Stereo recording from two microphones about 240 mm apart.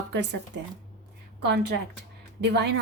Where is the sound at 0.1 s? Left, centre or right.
Right.